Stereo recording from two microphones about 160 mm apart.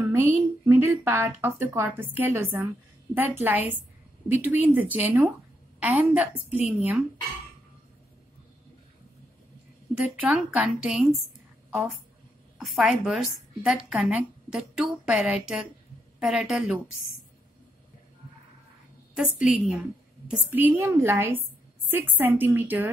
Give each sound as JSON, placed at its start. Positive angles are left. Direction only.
{"t": 0.1, "sound": "speech", "side_deg": -15}
{"t": 10.0, "sound": "speech", "side_deg": -5}
{"t": 12.5, "sound": "a woman's voice", "side_deg": 0}
{"t": 19.1, "sound": "a woman's voice", "side_deg": -5}